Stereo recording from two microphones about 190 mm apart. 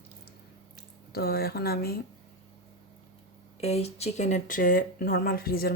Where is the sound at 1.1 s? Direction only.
55° left (ahead or behind).